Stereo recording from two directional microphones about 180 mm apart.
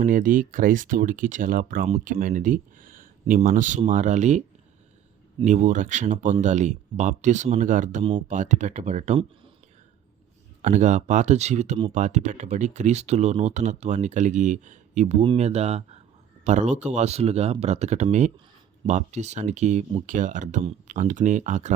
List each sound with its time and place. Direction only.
0.0 s speech: 45° right (ahead or behind)
5.5 s speech: 40° right (ahead or behind)
10.6 s speech: 40° right (ahead or behind)